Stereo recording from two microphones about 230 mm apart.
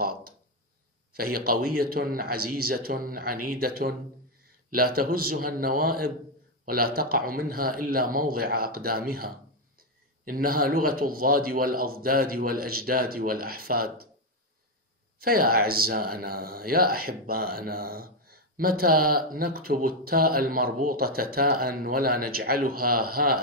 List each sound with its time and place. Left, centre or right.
1.1 s speech: right
15.1 s speech: right